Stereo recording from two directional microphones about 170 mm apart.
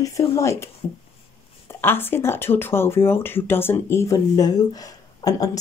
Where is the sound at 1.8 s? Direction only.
15° left (ahead or behind).